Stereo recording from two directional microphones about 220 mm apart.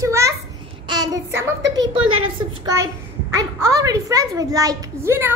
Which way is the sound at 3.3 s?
15° right (ahead or behind).